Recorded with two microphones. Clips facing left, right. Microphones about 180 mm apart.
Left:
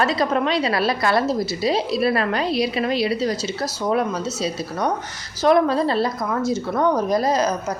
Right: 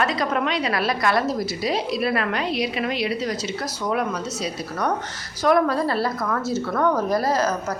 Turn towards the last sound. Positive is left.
turn(degrees=15)  # may be behind; listen again after turning